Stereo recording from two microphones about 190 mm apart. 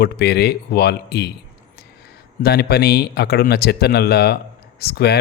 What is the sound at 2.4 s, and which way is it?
Speech, 55° left (ahead or behind).